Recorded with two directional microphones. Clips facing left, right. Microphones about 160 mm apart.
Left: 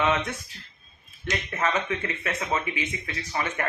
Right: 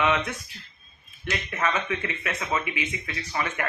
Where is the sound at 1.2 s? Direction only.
30° left (ahead or behind).